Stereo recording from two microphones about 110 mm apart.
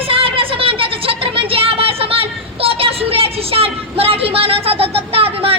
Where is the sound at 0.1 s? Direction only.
55° right (ahead or behind).